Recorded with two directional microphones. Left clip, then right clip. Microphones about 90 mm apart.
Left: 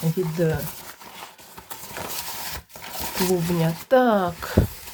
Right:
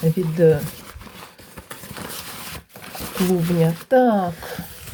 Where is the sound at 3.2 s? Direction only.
5° right (ahead or behind).